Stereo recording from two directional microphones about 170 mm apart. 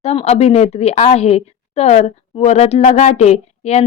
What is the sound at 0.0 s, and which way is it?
A woman's voice, 40° left (ahead or behind).